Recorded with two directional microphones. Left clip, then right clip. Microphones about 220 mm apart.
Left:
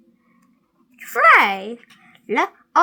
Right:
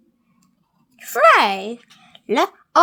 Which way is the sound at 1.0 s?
30° right (ahead or behind).